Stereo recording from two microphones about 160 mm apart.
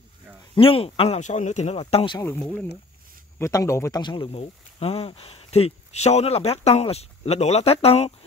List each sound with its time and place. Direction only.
0.6 s speech: 35° left (ahead or behind)
2.1 s speech: 20° left (ahead or behind)
4.0 s speech: 30° left (ahead or behind)